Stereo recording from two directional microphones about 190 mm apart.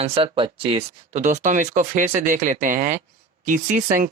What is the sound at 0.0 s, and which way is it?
Speech, 30° right (ahead or behind).